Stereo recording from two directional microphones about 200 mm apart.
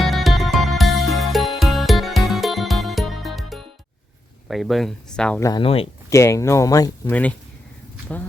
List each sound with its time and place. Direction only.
0.0 s music: centre (ahead or behind)
4.4 s speech: centre (ahead or behind)
5.4 s speech: 20° left (ahead or behind)
6.1 s speech: 15° left (ahead or behind)